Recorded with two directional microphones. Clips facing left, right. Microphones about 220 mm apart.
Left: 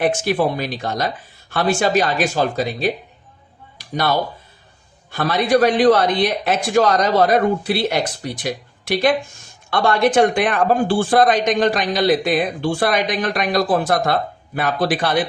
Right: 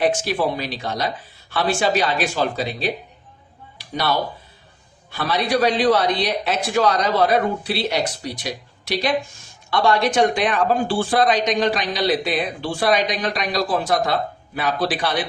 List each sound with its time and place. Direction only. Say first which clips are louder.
0.0 s speech: left 2 dB; 50° left (ahead or behind)
3.8 s a sound: left 3 dB; 50° left (ahead or behind)
5.1 s speech: left 4 dB; 50° left (ahead or behind)